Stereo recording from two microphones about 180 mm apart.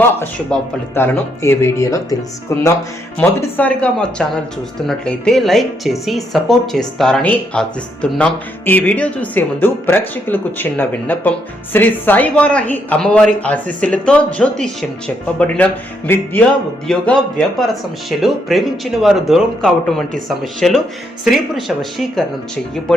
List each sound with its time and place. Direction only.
0.0 s speech: 10° left (ahead or behind)